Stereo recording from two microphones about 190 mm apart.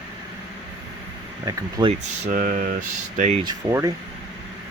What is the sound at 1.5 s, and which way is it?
Speech, 30° right (ahead or behind).